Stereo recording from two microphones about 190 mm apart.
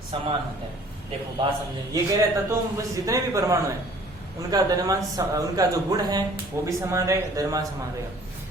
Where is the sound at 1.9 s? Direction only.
20° right (ahead or behind).